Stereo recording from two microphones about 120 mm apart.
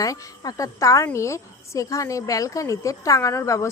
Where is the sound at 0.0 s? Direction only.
30° left (ahead or behind).